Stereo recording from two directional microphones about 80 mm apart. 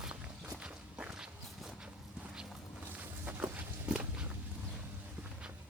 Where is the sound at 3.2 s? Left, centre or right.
Centre.